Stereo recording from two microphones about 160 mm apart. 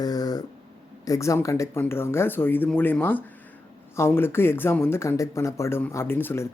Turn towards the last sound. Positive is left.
turn(degrees=15)  # may be behind; listen again after turning